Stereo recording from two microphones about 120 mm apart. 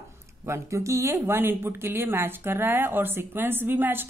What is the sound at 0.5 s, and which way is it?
Speech, 25° right (ahead or behind).